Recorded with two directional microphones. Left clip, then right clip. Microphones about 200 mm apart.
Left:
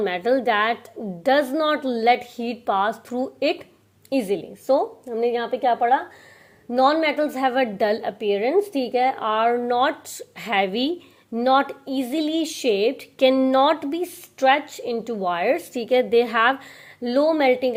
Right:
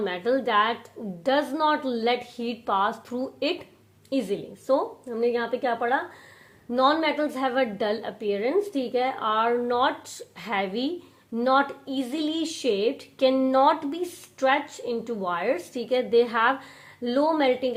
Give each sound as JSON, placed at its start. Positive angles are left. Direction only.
{"t": 0.0, "sound": "speech", "side_deg": 30}